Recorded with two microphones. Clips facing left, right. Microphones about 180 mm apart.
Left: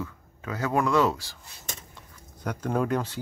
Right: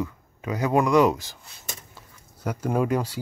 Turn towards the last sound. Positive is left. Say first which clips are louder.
# right 3 dB
turn(degrees=-10)  # may be behind; listen again after turning